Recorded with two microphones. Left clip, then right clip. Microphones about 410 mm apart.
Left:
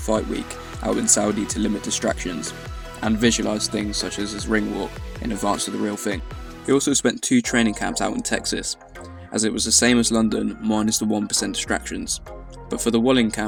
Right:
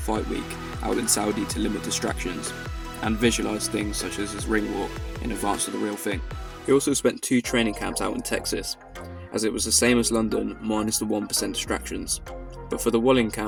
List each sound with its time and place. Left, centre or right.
0.9 s speech: right